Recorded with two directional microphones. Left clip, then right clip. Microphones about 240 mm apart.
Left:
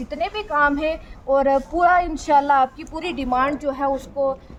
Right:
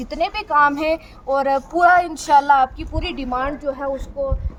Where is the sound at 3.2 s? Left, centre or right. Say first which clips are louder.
Left 3 dB; left.